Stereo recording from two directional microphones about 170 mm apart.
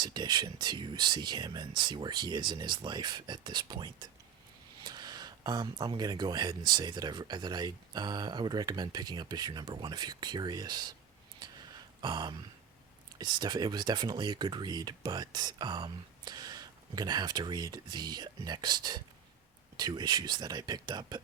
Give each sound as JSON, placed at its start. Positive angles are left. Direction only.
{"t": 0.0, "sound": "speech", "side_deg": -25}
{"t": 11.3, "sound": "a sound", "side_deg": -25}
{"t": 13.1, "sound": "speech", "side_deg": -25}